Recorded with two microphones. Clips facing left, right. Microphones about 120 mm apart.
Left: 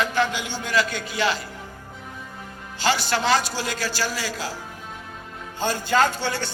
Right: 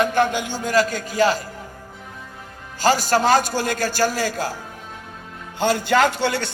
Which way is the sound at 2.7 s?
45° right (ahead or behind).